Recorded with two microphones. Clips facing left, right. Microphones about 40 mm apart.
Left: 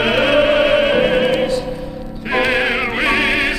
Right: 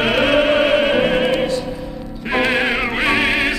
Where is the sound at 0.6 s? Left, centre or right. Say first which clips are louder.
Left 1 dB; centre.